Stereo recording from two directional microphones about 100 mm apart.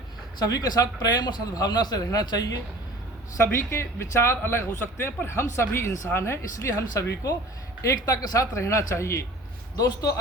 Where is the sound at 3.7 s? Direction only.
25° left (ahead or behind).